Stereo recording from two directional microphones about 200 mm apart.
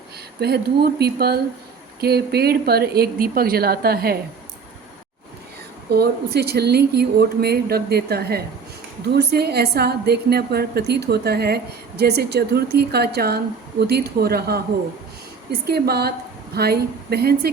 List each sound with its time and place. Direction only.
0.3 s a woman's voice: 55° right (ahead or behind)
5.9 s a woman's voice: 55° right (ahead or behind)
15.6 s a woman's voice: 55° right (ahead or behind)